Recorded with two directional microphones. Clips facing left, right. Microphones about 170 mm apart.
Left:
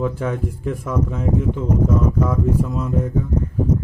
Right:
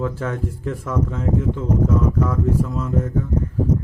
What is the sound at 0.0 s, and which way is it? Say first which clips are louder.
Speech: left 2 dB; 15° left (ahead or behind).